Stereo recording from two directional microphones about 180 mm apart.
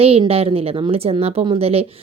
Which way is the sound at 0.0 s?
35° right (ahead or behind).